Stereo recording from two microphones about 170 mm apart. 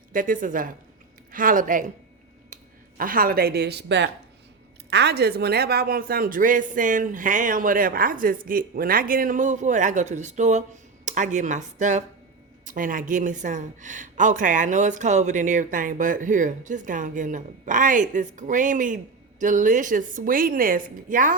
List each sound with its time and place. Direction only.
0.1 s a woman's voice: 55° right (ahead or behind)
2.5 s a sound: 45° right (ahead or behind)
3.0 s a woman's voice: 55° right (ahead or behind); by 4.1 s 90° right
4.9 s a woman's voice: 80° right; by 21.3 s 50° right (ahead or behind)